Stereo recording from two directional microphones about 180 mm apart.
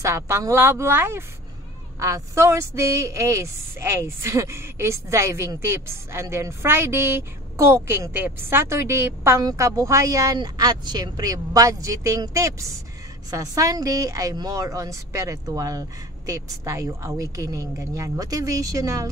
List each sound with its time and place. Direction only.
0.0 s a woman's voice: 15° right (ahead or behind)